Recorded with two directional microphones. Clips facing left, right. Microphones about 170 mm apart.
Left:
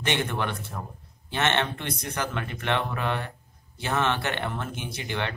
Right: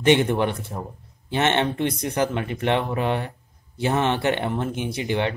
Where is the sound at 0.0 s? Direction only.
15° right (ahead or behind).